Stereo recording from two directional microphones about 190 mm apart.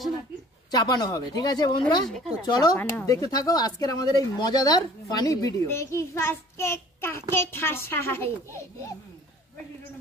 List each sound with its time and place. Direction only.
0.7 s speech: 20° left (ahead or behind)